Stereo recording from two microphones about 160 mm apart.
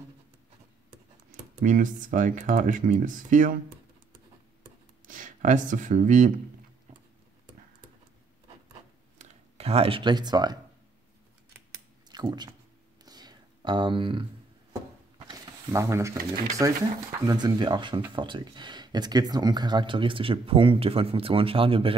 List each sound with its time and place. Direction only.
1.3 s speech: 55° right (ahead or behind)
5.0 s speech: 55° right (ahead or behind)
9.2 s speech: 40° right (ahead or behind)
12.1 s speech: 25° right (ahead or behind)
13.0 s a sound: 25° right (ahead or behind)
17.2 s speech: 25° right (ahead or behind)